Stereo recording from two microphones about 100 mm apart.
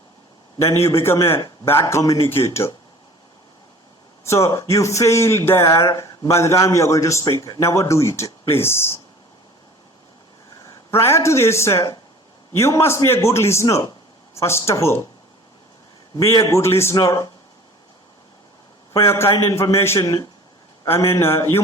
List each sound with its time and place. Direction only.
0.6 s a man's voice: 25° left (ahead or behind)
4.3 s a man's voice: 30° left (ahead or behind)
10.6 s a man's voice: 30° left (ahead or behind)
16.2 s a man's voice: 30° left (ahead or behind)
18.9 s a man's voice: 25° left (ahead or behind)